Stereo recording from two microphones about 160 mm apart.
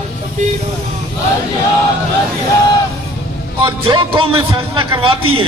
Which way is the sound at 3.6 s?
30° right (ahead or behind).